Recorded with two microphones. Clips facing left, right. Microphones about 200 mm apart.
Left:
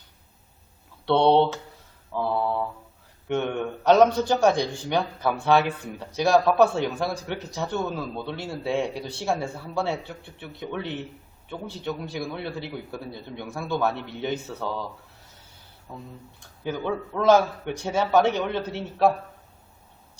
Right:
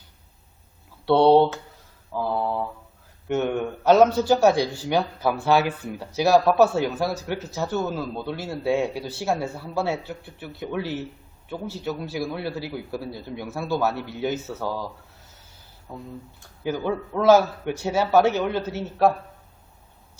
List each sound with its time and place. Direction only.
1.0 s speech: 5° right (ahead or behind)
2.1 s mantra: 5° right (ahead or behind)
3.2 s a man's voice: 5° right (ahead or behind)
15.9 s a man's voice: 5° right (ahead or behind)